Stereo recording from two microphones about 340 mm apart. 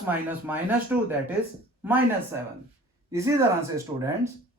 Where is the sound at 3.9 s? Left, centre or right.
Right.